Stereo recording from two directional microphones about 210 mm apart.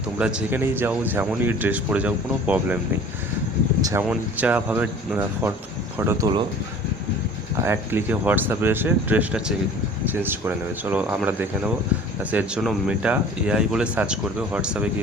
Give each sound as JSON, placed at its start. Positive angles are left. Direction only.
{"t": 0.2, "sound": "speech", "side_deg": -5}
{"t": 3.8, "sound": "speech", "side_deg": -15}
{"t": 4.0, "sound": "speech", "side_deg": -5}
{"t": 7.6, "sound": "speech", "side_deg": -10}